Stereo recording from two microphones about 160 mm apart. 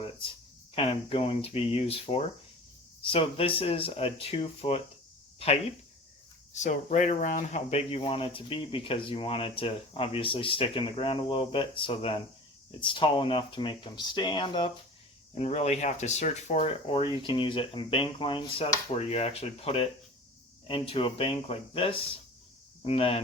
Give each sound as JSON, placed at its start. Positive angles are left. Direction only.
{"t": 0.0, "sound": "a sound", "side_deg": 35}
{"t": 0.8, "sound": "speech", "side_deg": 35}
{"t": 6.5, "sound": "speech", "side_deg": 50}
{"t": 15.4, "sound": "speech", "side_deg": 40}